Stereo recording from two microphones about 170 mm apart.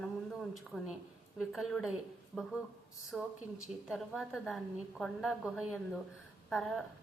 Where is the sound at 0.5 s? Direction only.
Centre (ahead or behind).